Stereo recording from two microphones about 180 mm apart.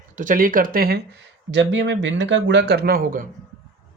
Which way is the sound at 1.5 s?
90° right.